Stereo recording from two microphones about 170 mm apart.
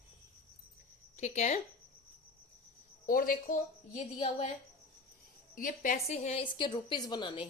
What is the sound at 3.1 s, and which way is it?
Speech, 55° left (ahead or behind).